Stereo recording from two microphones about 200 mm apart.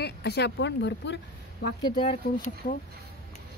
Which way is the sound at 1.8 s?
20° left (ahead or behind).